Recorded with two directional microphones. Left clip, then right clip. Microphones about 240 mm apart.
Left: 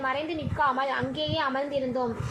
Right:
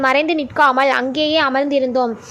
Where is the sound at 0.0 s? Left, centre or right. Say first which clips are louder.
Right 14 dB; right.